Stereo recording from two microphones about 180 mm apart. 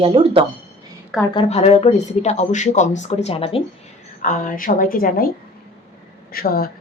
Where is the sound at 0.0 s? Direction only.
30° right (ahead or behind).